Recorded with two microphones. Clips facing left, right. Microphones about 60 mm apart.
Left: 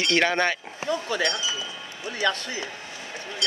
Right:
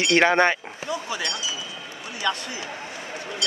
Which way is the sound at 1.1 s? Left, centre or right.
Left.